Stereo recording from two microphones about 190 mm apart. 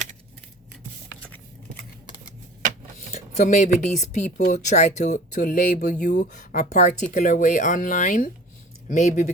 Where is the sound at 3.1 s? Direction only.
40° left (ahead or behind).